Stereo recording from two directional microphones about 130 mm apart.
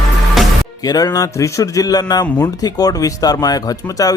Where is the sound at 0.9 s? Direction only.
30° left (ahead or behind).